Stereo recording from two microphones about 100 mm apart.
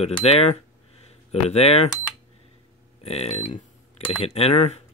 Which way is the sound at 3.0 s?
90° left.